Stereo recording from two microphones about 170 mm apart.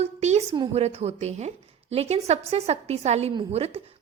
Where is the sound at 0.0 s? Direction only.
40° right (ahead or behind).